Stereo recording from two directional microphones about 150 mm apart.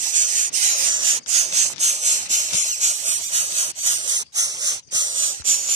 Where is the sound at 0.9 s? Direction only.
35° right (ahead or behind).